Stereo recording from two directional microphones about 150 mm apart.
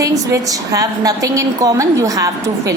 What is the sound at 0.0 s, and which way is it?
A woman's voice, 20° right (ahead or behind).